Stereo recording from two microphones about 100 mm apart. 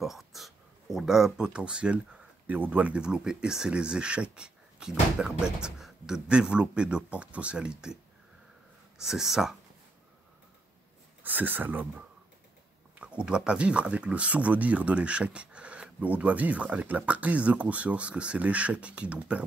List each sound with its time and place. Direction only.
0.0 s speech: centre (ahead or behind)
11.2 s speech: 20° right (ahead or behind)
13.0 s speech: 10° right (ahead or behind)